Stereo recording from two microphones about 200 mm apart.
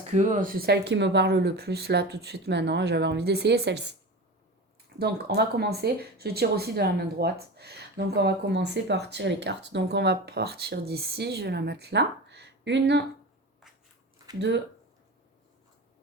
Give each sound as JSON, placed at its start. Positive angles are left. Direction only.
{"t": 0.1, "sound": "speech", "side_deg": -35}
{"t": 4.9, "sound": "speech", "side_deg": -55}
{"t": 14.3, "sound": "speech", "side_deg": -60}